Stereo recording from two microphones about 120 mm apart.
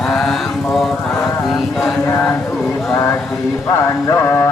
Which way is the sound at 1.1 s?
Centre (ahead or behind).